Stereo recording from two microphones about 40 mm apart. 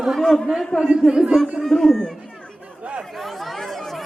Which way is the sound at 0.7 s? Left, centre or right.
Left.